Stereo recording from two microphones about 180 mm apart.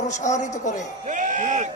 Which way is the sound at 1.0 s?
45° right (ahead or behind).